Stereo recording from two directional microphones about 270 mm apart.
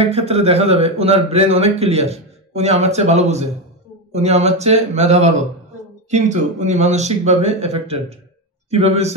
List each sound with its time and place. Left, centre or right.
0.0 s a man's voice: right